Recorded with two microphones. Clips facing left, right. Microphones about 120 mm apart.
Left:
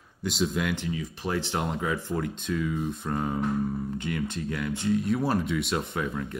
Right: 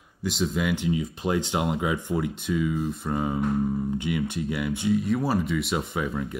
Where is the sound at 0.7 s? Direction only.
20° right (ahead or behind).